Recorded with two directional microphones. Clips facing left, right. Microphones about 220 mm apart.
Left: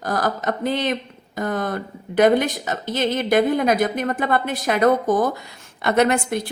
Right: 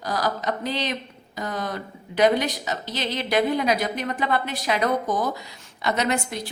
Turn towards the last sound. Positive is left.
turn(degrees=55)  # may be behind; listen again after turning